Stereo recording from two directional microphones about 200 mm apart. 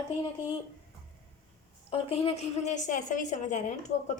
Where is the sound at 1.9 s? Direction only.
30° left (ahead or behind).